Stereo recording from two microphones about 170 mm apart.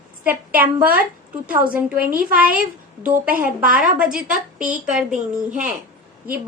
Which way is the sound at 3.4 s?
5° right (ahead or behind).